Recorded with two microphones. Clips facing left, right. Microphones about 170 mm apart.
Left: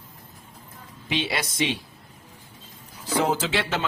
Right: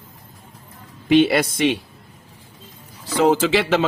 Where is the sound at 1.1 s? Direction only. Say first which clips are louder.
Right 13 dB; 55° right (ahead or behind).